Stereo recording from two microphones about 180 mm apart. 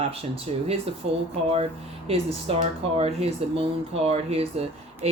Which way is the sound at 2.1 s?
35° right (ahead or behind).